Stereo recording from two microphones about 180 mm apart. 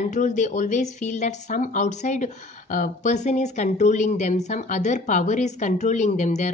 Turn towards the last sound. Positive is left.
turn(degrees=40)  # may be behind; listen again after turning